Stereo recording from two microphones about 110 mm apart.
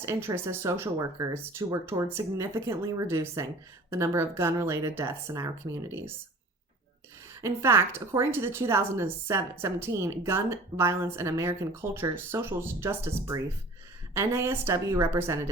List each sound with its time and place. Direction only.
0.0 s a woman's voice: 25° right (ahead or behind)
7.4 s a woman's voice: 25° right (ahead or behind)